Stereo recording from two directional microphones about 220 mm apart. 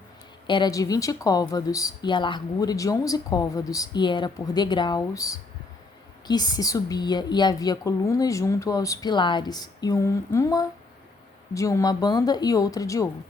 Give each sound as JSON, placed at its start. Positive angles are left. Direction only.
{"t": 0.4, "sound": "speech", "side_deg": 20}